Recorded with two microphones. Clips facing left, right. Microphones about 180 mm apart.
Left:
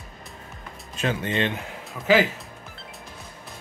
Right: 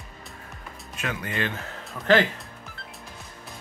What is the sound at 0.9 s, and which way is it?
Speech, 25° left (ahead or behind).